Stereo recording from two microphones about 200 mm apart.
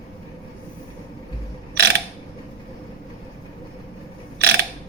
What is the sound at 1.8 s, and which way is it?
Mechanisms, 55° right (ahead or behind).